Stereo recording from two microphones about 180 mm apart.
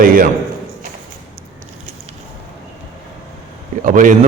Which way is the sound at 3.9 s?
45° right (ahead or behind).